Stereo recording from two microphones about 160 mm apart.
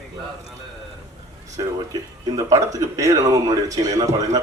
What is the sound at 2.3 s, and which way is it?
Speech, 20° right (ahead or behind).